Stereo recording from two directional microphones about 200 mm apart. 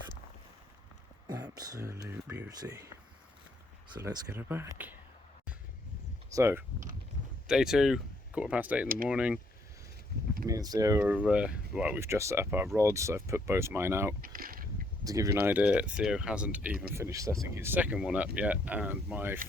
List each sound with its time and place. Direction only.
1.3 s speech: 20° right (ahead or behind)
4.0 s speech: 10° right (ahead or behind)
6.3 s speech: 10° right (ahead or behind)
10.4 s speech: 20° right (ahead or behind)
11.0 s speech: 5° right (ahead or behind)
14.2 s a sound: 45° right (ahead or behind)
15.0 s speech: 15° right (ahead or behind)